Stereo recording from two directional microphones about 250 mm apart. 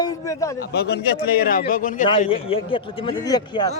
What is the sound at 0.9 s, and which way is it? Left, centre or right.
A man's voice, left.